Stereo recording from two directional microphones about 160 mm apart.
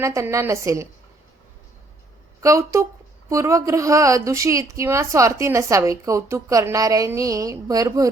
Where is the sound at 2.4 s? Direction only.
20° right (ahead or behind).